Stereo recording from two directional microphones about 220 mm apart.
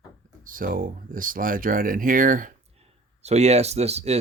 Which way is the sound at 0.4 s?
40° right (ahead or behind).